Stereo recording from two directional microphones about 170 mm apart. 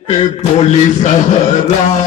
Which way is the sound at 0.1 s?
40° left (ahead or behind).